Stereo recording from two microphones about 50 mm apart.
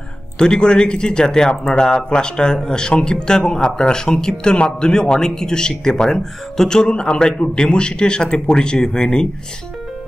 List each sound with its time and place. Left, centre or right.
0.4 s speech: centre